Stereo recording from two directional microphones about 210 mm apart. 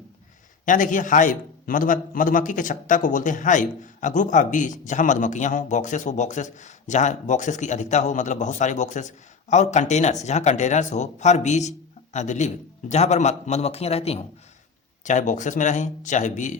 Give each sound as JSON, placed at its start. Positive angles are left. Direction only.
{"t": 0.6, "sound": "a man's voice", "side_deg": 40}